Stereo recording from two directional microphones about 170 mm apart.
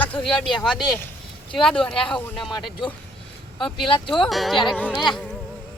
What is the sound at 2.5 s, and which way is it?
Speech, 30° left (ahead or behind).